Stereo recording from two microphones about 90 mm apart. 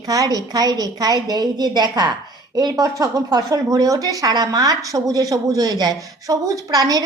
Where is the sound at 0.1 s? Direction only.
45° right (ahead or behind).